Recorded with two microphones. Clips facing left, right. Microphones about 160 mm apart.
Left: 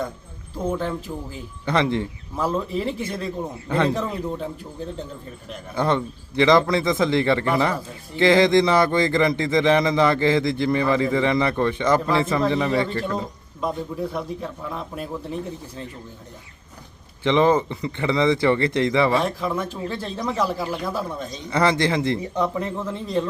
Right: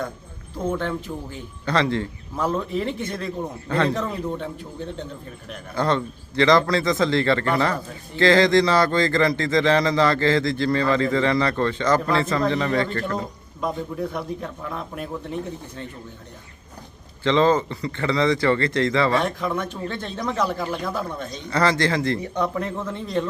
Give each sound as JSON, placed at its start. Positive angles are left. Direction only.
{"t": 0.5, "sound": "a man's voice", "side_deg": 10}
{"t": 1.6, "sound": "a man's voice", "side_deg": 20}
{"t": 2.3, "sound": "a man's voice", "side_deg": 5}
{"t": 5.7, "sound": "a man's voice", "side_deg": 20}
{"t": 13.6, "sound": "a man's voice", "side_deg": 0}
{"t": 17.2, "sound": "speech", "side_deg": 20}
{"t": 19.2, "sound": "a man's voice", "side_deg": 5}
{"t": 21.5, "sound": "speech", "side_deg": 20}
{"t": 22.4, "sound": "a man's voice", "side_deg": 0}